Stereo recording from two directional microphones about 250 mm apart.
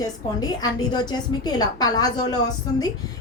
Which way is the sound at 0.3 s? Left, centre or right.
Centre.